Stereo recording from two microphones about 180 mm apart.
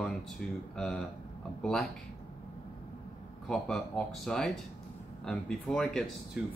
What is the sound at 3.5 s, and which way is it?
Speech, 5° left (ahead or behind).